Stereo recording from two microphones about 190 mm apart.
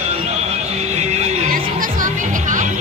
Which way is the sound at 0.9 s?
35° right (ahead or behind).